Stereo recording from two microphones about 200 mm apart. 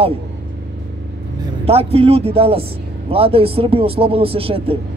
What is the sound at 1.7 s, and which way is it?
Speech, 30° right (ahead or behind).